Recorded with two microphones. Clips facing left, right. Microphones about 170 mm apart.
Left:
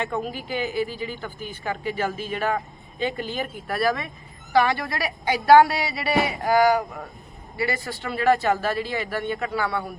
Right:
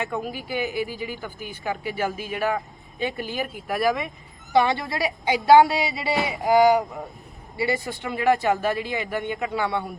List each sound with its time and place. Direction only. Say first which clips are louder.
0.0 s speech: left 1 dB; 10° right (ahead or behind)